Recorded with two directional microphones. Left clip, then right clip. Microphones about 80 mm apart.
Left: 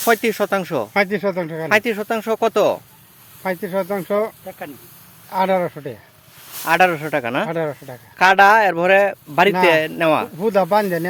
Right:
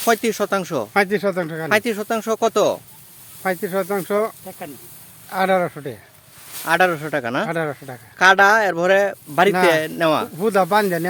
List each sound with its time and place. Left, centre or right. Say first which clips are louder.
0.1 s speech: left 1 dB; centre
0.9 s speech: right 1 dB; right
1.7 s speech: left 2 dB; centre
3.4 s speech: even; right
6.7 s speech: left 2 dB; centre
7.4 s speech: left 1 dB; right
8.2 s speech: left 2 dB; centre
10.3 s speech: left 1 dB; right